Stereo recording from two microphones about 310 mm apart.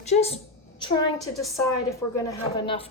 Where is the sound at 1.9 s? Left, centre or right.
Centre.